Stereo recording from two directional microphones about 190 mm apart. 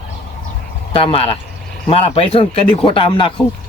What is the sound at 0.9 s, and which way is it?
Speech, 30° left (ahead or behind).